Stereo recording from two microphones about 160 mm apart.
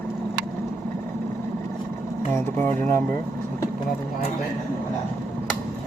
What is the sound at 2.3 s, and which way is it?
Speech, 15° left (ahead or behind).